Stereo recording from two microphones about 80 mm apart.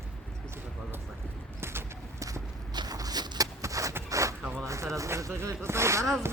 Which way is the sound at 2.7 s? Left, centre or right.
Right.